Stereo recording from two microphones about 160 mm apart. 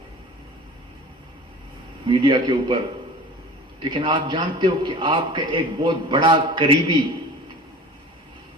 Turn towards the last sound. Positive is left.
turn(degrees=-30)  # may be behind; listen again after turning